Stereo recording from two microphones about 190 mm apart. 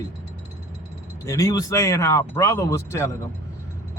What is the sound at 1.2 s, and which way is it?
Speech, 15° left (ahead or behind).